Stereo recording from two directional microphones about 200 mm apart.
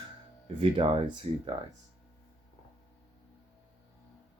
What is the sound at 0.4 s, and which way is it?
Speech, 30° right (ahead or behind).